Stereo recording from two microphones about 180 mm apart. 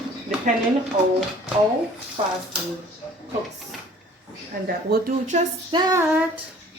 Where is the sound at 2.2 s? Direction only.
30° right (ahead or behind).